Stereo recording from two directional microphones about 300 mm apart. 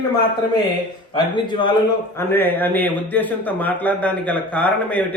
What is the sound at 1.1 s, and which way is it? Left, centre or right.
A man's voice, centre.